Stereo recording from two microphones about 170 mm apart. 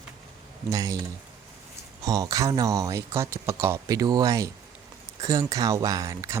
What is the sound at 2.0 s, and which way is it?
Speech, 20° right (ahead or behind).